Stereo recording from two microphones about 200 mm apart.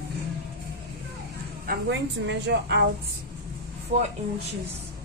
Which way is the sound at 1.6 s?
60° right (ahead or behind).